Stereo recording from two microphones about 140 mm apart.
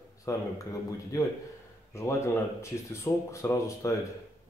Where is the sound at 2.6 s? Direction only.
20° left (ahead or behind).